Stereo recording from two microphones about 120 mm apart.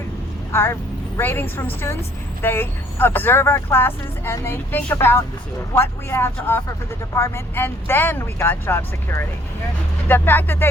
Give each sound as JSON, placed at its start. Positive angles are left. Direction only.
{"t": 0.5, "sound": "a woman's voice", "side_deg": 20}